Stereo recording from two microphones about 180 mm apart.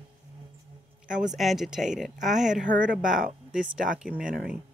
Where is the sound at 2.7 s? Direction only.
45° right (ahead or behind).